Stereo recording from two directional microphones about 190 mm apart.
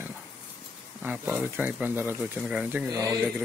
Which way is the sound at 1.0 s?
10° right (ahead or behind).